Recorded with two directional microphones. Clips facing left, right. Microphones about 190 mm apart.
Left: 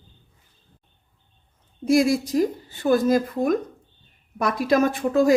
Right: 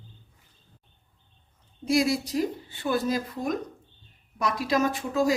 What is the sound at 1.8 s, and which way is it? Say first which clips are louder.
Speech: left 5 dB; 50° left (ahead or behind).